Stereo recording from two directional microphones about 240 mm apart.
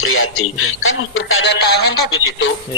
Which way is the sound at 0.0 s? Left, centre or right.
Left.